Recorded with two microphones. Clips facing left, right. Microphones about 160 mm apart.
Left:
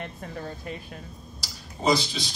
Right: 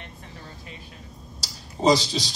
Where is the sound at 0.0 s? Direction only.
50° left (ahead or behind).